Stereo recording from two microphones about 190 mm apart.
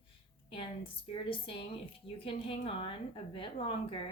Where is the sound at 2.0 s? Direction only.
30° left (ahead or behind).